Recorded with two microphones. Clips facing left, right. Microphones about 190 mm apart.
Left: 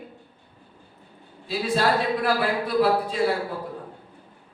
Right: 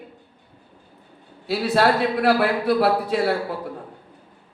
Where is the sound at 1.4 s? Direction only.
65° right (ahead or behind).